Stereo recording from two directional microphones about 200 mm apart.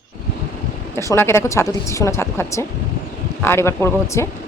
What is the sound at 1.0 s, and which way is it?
Speech, 15° left (ahead or behind).